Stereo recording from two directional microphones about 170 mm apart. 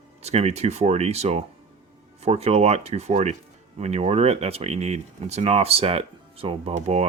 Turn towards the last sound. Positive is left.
turn(degrees=-40)  # may be behind; listen again after turning